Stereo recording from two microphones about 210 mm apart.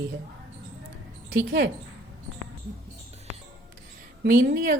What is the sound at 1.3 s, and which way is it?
Speech, 60° right (ahead or behind).